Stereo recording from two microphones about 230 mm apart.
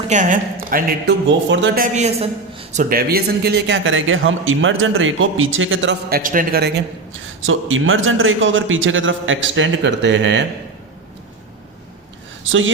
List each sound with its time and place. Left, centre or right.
0.1 s a man's voice: right
2.9 s speech: right
7.4 s a man's voice: right
12.5 s a man's voice: right